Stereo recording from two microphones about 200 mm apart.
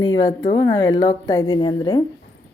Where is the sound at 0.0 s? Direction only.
20° left (ahead or behind).